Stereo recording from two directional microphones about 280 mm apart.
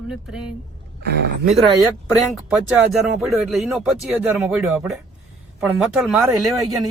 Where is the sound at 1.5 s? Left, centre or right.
Centre.